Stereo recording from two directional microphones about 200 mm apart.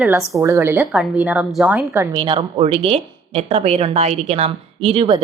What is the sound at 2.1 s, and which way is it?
A woman's voice, 25° right (ahead or behind).